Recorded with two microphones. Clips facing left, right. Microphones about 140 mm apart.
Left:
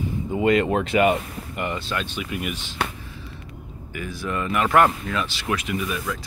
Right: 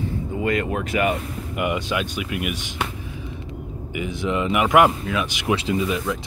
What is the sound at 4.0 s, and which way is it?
Speech, 20° right (ahead or behind).